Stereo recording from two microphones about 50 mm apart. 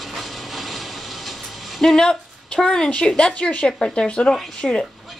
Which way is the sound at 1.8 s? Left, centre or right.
Centre.